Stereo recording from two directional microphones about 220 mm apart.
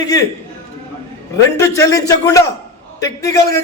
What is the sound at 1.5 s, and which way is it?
A man's voice, 15° left (ahead or behind).